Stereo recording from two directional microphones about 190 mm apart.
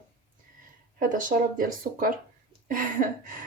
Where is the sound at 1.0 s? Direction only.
45° right (ahead or behind).